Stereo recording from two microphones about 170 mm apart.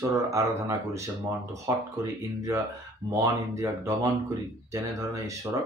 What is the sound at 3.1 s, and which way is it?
Speech, 20° right (ahead or behind).